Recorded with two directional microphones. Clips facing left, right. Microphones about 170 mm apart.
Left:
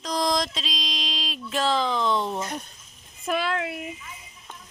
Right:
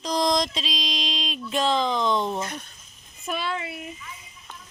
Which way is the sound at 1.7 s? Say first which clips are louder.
Even; 20° right (ahead or behind).